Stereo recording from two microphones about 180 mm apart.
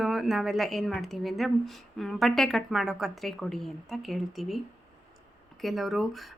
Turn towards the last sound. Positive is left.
turn(degrees=0)  # may be behind; listen again after turning